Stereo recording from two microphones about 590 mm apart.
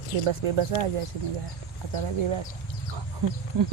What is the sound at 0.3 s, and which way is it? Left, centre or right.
Speech, right.